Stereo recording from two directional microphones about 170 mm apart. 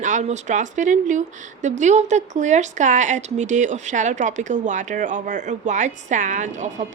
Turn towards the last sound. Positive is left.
turn(degrees=-45)  # may be behind; listen again after turning